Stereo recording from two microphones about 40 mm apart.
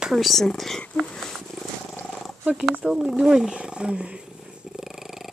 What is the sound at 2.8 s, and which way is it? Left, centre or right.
Speech, centre.